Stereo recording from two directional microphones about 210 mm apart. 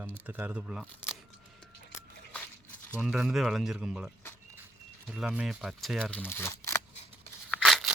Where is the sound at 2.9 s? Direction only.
Centre (ahead or behind).